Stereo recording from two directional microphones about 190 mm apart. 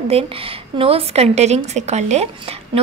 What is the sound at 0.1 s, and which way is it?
A woman's voice, 30° right (ahead or behind).